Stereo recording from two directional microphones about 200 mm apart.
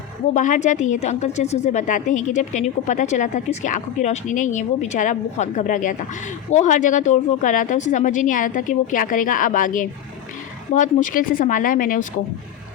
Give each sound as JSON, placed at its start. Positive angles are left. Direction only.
{"t": 0.3, "sound": "a woman's voice", "side_deg": 35}